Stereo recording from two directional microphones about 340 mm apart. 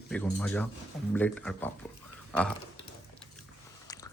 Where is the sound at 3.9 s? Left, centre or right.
Centre.